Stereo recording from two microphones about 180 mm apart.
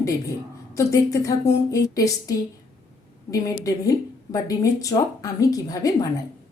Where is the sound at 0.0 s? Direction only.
15° left (ahead or behind).